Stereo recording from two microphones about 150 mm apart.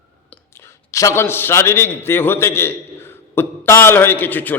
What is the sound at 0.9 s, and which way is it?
A man's voice, 20° left (ahead or behind).